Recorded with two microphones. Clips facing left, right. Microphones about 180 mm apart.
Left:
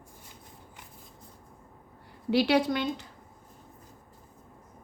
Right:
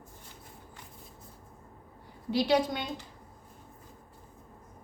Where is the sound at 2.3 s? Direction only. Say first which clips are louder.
Left 2 dB; 70° left (ahead or behind).